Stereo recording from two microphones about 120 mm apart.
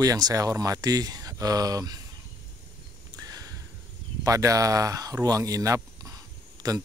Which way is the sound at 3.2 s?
30° right (ahead or behind).